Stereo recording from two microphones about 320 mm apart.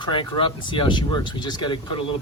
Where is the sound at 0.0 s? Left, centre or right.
Centre.